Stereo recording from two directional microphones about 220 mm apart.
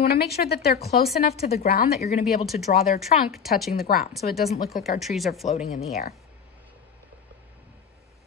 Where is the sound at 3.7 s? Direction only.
45° left (ahead or behind).